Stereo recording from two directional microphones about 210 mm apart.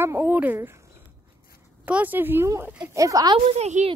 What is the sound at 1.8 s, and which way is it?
A woman's voice, 10° right (ahead or behind).